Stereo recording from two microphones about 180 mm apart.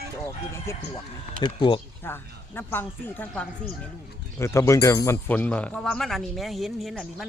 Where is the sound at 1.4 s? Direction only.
25° left (ahead or behind).